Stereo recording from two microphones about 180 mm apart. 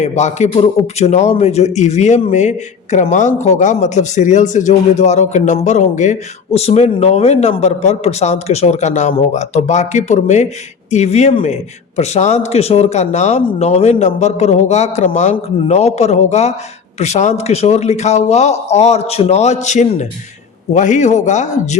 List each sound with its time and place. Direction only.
0.0 s a man's voice: 40° left (ahead or behind)